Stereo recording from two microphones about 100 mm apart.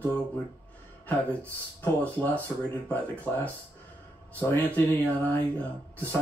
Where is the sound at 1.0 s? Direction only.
15° left (ahead or behind).